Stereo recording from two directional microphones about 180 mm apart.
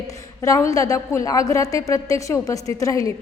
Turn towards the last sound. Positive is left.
turn(degrees=20)  # may be behind; listen again after turning